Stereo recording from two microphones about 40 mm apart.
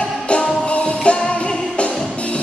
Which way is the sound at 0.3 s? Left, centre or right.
Left.